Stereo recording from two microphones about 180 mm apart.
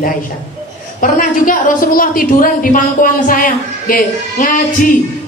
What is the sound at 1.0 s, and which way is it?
A woman's voice, 50° left (ahead or behind).